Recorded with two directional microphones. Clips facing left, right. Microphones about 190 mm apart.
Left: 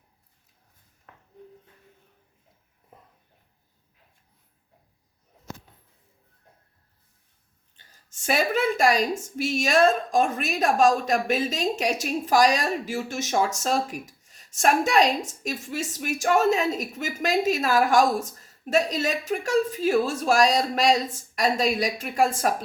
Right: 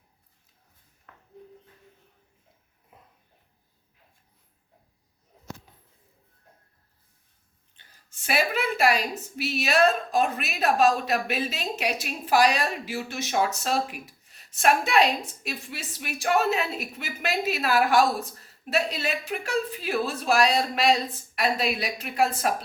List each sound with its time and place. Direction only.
7.8 s a woman's voice: 45° left (ahead or behind)